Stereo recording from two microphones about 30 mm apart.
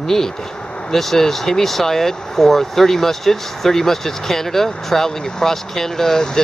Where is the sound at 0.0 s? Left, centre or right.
Centre.